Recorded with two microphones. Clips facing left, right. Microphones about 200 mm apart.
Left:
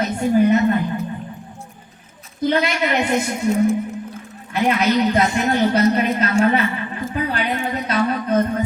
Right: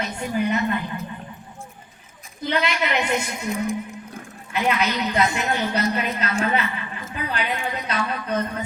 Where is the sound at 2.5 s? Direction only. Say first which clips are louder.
Left 4 dB; 40° left (ahead or behind).